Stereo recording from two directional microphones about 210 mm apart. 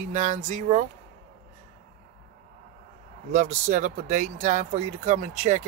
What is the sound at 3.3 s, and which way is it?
Speech, 35° right (ahead or behind).